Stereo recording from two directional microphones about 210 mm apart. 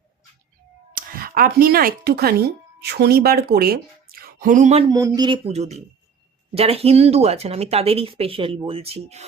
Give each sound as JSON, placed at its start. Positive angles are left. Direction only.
{"t": 0.9, "sound": "speech", "side_deg": -45}
{"t": 4.9, "sound": "speech", "side_deg": -15}